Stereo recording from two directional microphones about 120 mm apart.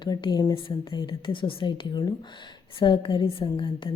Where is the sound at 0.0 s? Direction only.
40° left (ahead or behind).